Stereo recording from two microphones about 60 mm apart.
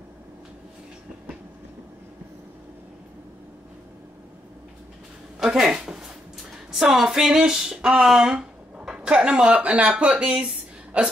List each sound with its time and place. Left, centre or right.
5.4 s speech: centre